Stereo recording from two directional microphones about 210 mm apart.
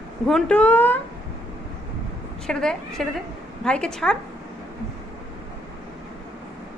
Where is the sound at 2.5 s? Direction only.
5° left (ahead or behind).